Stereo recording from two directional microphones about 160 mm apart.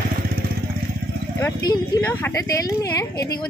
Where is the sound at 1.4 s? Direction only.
25° left (ahead or behind).